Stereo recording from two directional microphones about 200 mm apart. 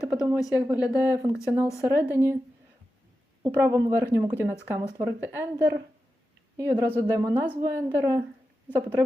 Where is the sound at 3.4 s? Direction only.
15° right (ahead or behind).